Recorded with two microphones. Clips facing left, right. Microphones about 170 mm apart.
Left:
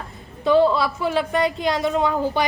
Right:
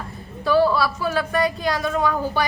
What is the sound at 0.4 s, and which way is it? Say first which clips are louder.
A woman's voice: left 1 dB; 20° left (ahead or behind).